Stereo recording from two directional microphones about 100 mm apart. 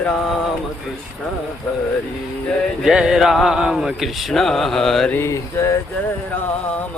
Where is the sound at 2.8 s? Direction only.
5° right (ahead or behind).